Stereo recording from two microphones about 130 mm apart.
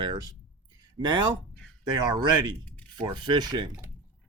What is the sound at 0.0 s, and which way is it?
Speech, 30° right (ahead or behind).